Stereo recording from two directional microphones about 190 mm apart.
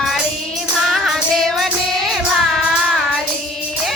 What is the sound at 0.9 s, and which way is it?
Music, centre (ahead or behind).